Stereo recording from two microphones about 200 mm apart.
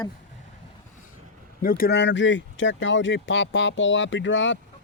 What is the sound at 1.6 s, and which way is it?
Speech, 45° left (ahead or behind).